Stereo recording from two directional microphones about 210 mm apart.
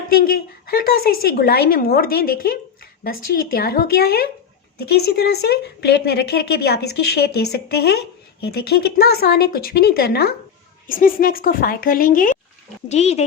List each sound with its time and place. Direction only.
0.1 s a woman's voice: 45° left (ahead or behind)